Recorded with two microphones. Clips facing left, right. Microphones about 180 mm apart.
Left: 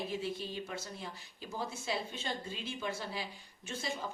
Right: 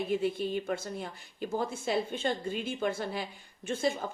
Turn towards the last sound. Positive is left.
turn(degrees=-55)  # may be behind; listen again after turning